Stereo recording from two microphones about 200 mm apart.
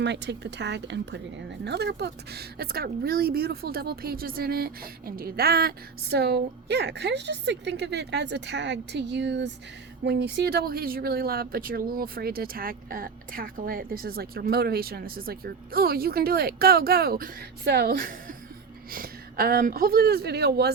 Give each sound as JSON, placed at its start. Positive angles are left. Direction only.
{"t": 0.0, "sound": "speech", "side_deg": -60}